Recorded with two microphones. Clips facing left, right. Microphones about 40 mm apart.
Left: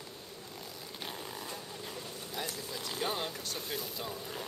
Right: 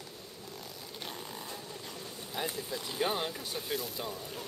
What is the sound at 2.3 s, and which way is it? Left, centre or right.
Speech, centre.